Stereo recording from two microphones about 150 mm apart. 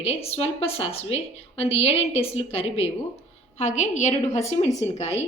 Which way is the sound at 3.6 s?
55° left (ahead or behind).